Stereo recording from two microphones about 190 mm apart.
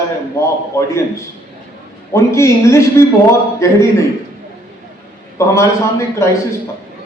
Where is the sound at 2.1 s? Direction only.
15° left (ahead or behind).